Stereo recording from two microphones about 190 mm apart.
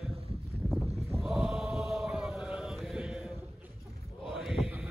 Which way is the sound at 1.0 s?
Centre (ahead or behind).